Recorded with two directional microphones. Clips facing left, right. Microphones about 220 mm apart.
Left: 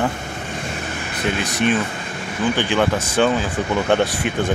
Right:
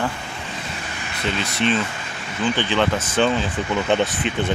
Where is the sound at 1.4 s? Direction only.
15° left (ahead or behind).